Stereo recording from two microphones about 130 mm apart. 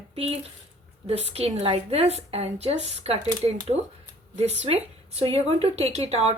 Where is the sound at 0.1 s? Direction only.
50° right (ahead or behind).